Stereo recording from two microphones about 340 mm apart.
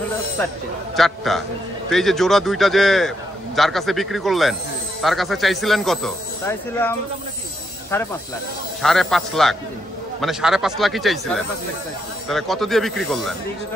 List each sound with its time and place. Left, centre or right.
0.4 s a man's voice: centre